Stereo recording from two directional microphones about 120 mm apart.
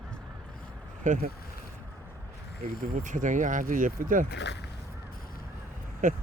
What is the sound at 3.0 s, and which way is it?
Speech, 90° right.